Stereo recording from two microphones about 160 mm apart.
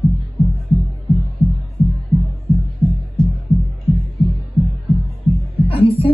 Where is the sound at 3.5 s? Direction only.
40° left (ahead or behind).